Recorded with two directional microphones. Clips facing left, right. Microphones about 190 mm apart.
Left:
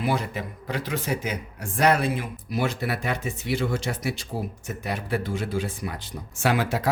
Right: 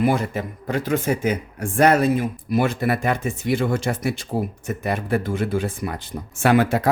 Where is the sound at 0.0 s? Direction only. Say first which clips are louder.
Right 6 dB; 50° right (ahead or behind).